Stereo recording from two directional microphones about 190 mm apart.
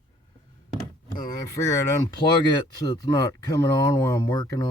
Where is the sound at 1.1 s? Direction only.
20° left (ahead or behind).